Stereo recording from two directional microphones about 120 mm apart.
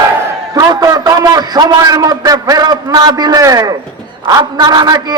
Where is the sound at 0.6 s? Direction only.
30° right (ahead or behind).